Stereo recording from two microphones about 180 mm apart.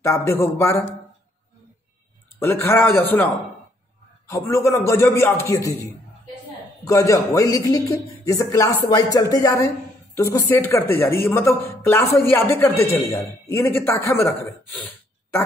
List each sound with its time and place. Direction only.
0.0 s speech: 15° left (ahead or behind)
2.4 s speech: 10° left (ahead or behind)
4.3 s speech: 15° left (ahead or behind)
6.8 s a man's voice: 20° left (ahead or behind)